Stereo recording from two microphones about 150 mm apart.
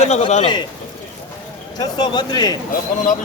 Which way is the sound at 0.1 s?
50° left (ahead or behind).